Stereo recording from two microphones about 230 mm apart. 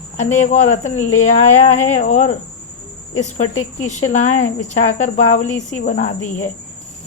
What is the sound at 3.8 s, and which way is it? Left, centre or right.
Speech, left.